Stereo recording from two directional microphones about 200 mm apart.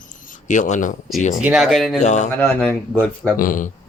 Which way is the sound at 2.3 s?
10° left (ahead or behind).